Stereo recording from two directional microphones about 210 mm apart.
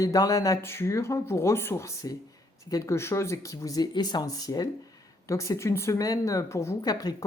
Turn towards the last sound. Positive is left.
turn(degrees=20)  # may be behind; listen again after turning